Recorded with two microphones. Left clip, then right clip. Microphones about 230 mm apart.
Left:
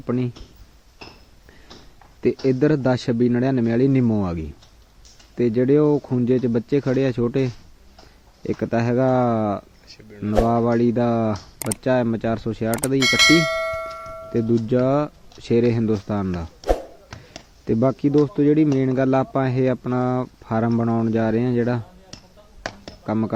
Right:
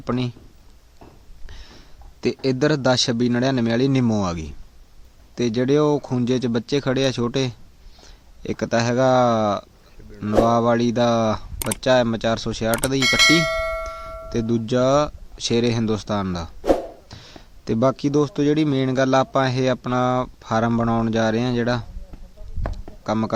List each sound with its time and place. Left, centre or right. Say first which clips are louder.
0.0 s a man's voice: even; centre
2.2 s a man's voice: left 1 dB; centre
23.0 s a man's voice: right 1 dB; centre